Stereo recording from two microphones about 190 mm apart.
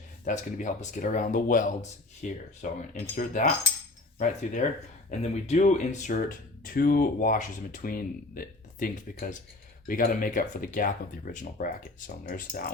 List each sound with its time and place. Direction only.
0.3 s speech: 40° left (ahead or behind)